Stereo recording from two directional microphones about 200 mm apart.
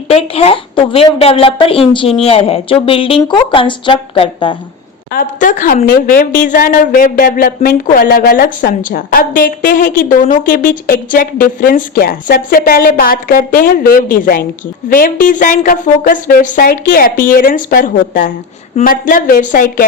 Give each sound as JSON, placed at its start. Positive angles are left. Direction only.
{"t": 0.1, "sound": "a woman's voice", "side_deg": 30}
{"t": 5.1, "sound": "a woman's voice", "side_deg": 40}